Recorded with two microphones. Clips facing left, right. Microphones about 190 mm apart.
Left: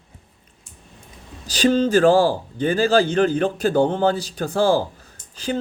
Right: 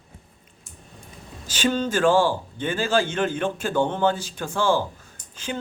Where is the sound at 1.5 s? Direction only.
35° left (ahead or behind).